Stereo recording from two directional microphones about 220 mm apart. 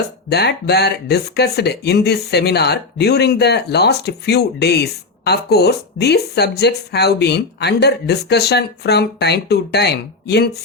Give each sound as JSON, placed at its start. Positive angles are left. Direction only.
{"t": 0.3, "sound": "speech", "side_deg": 50}